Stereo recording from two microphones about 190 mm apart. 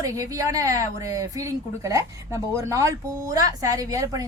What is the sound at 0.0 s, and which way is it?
A woman's voice, 15° right (ahead or behind).